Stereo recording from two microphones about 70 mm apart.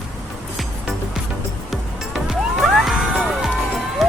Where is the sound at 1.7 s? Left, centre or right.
Centre.